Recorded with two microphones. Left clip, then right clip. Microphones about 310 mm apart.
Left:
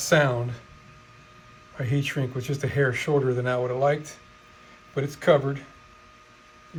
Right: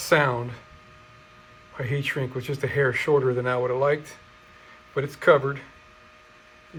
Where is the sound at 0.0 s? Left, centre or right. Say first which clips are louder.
Even; centre.